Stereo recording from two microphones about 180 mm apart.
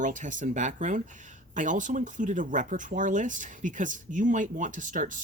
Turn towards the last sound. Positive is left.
turn(degrees=-45)  # may be behind; listen again after turning